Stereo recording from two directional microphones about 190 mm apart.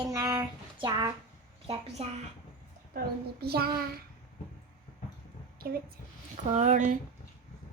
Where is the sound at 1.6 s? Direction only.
30° right (ahead or behind).